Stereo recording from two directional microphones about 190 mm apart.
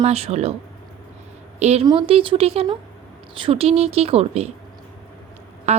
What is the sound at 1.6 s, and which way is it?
A woman's voice, 35° right (ahead or behind).